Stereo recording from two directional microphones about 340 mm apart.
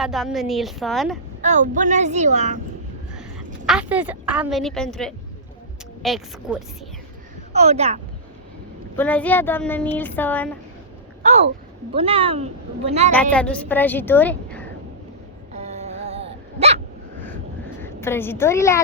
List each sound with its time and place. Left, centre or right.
0.0 s speech: centre
1.4 s speech: right
3.7 s speech: centre
7.5 s speech: centre
9.0 s speech: centre
11.2 s speech: centre
13.3 s speech: centre
15.5 s a sound: centre
16.6 s dog: centre
17.7 s a woman's voice: centre